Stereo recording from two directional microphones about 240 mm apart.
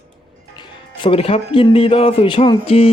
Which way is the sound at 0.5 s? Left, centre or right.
Left.